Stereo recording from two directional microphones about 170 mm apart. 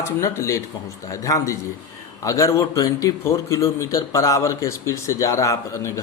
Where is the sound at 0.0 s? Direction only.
15° left (ahead or behind).